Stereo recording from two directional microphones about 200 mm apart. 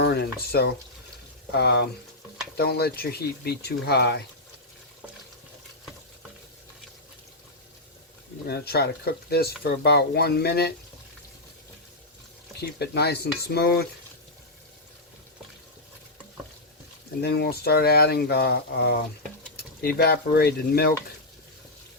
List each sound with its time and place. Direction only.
0.0 s a sound: 55° left (ahead or behind)
1.5 s speech: 55° left (ahead or behind)
8.4 s speech: 55° left (ahead or behind)
12.8 s speech: 55° left (ahead or behind)
17.2 s speech: 55° left (ahead or behind)